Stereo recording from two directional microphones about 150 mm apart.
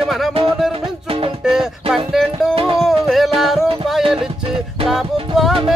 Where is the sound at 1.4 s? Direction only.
5° right (ahead or behind).